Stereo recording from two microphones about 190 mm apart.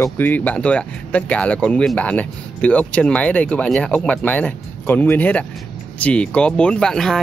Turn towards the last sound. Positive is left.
turn(degrees=0)  # may be behind; listen again after turning